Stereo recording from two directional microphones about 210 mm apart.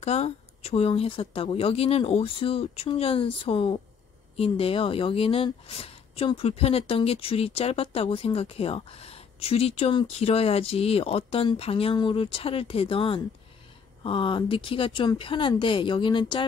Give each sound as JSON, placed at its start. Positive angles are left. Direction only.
{"t": 0.0, "sound": "speech", "side_deg": 30}